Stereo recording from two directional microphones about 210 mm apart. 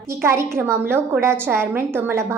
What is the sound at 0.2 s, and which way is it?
A woman's voice, 10° right (ahead or behind).